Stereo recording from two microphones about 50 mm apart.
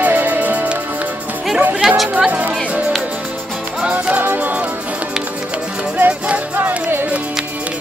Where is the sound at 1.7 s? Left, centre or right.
Right.